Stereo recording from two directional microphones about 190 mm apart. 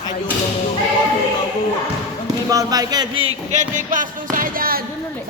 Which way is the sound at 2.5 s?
20° right (ahead or behind).